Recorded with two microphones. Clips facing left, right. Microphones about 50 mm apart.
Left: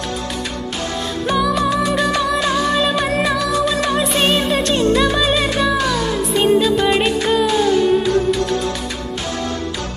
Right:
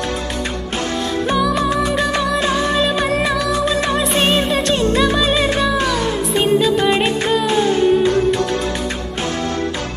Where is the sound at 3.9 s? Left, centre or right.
Centre.